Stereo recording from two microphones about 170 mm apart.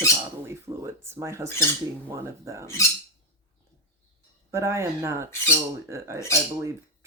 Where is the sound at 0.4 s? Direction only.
15° right (ahead or behind).